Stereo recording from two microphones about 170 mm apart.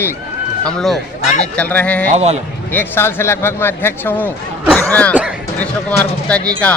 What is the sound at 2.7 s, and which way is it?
A man's voice, 10° left (ahead or behind).